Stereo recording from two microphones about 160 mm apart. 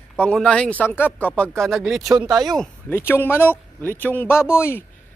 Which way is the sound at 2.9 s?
15° left (ahead or behind).